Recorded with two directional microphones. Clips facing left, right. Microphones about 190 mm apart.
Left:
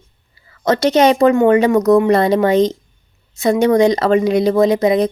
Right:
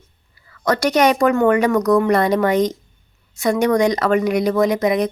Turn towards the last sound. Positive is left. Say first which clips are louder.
# left 4 dB
turn(degrees=30)  # may be behind; listen again after turning